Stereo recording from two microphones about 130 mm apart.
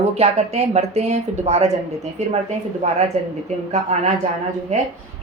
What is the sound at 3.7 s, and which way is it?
Speech, 55° right (ahead or behind).